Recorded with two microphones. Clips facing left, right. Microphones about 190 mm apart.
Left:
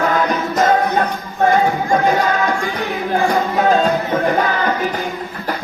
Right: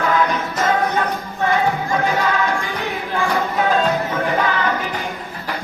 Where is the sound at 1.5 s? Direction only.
45° left (ahead or behind).